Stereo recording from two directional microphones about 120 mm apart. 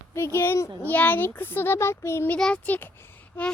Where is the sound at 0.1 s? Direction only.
20° left (ahead or behind).